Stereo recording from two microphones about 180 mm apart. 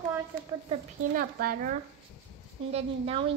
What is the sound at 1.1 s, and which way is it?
Speech, 50° right (ahead or behind).